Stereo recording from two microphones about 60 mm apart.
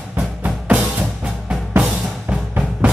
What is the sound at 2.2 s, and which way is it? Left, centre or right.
Drum, right.